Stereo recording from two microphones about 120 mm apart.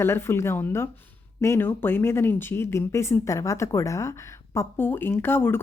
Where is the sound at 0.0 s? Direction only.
20° left (ahead or behind).